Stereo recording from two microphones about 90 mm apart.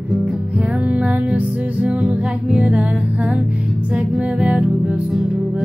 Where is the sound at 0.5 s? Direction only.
15° right (ahead or behind).